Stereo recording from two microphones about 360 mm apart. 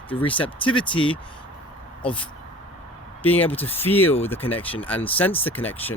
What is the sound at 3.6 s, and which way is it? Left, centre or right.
Speech, centre.